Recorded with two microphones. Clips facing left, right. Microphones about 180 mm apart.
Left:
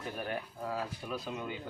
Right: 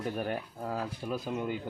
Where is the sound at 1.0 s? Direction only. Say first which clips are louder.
Right 4 dB; 30° right (ahead or behind).